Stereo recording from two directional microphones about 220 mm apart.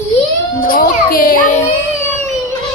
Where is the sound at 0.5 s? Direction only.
40° left (ahead or behind).